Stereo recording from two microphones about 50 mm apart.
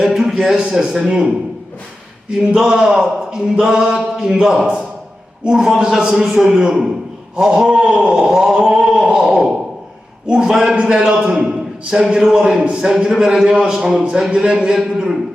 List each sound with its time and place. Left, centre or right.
0.0 s a man's voice: centre
2.6 s speech: centre
6.6 s a man's voice: centre